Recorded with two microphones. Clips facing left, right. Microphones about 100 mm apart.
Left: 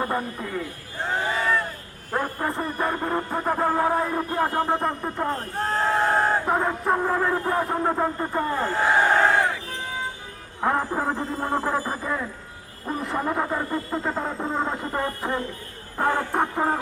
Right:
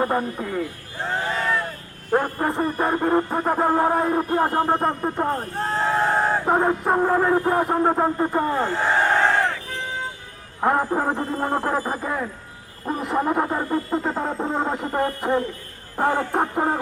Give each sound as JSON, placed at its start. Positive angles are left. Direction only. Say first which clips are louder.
{"t": 1.0, "sound": "a sound", "louder": "even", "side_deg": 0}
{"t": 2.1, "sound": "music", "louder": "right 5 dB", "side_deg": -25}
{"t": 5.5, "sound": "speech", "louder": "even", "side_deg": 0}
{"t": 6.6, "sound": "music", "louder": "right 4 dB", "side_deg": -25}
{"t": 7.7, "sound": "music", "louder": "right 4 dB", "side_deg": -25}
{"t": 8.5, "sound": "speech", "louder": "even", "side_deg": 0}
{"t": 10.6, "sound": "a sound", "louder": "right 3 dB", "side_deg": -20}
{"t": 11.3, "sound": "music", "louder": "right 2 dB", "side_deg": -5}
{"t": 11.8, "sound": "music", "louder": "right 2 dB", "side_deg": -25}
{"t": 12.8, "sound": "music", "louder": "right 3 dB", "side_deg": -5}
{"t": 13.1, "sound": "a sound", "louder": "right 4 dB", "side_deg": -15}
{"t": 16.0, "sound": "music", "louder": "right 2 dB", "side_deg": -20}
{"t": 16.3, "sound": "a sound", "louder": "right 1 dB", "side_deg": -10}